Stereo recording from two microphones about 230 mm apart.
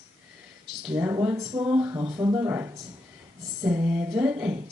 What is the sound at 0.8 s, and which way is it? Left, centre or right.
Speech, centre.